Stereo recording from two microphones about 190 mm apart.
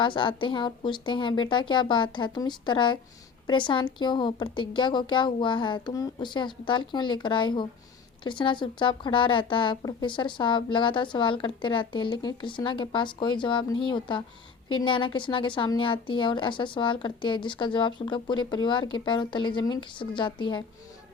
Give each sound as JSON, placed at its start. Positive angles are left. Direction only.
{"t": 0.0, "sound": "a woman's voice", "side_deg": 25}